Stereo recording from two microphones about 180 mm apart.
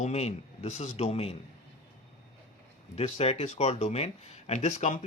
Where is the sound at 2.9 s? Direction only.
35° left (ahead or behind).